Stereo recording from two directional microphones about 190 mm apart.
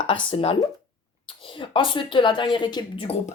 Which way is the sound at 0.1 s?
30° left (ahead or behind).